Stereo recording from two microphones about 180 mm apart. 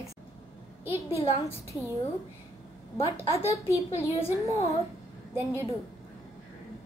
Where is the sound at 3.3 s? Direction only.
15° left (ahead or behind).